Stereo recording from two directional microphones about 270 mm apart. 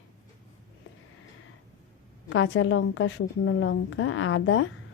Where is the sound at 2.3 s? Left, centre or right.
Left.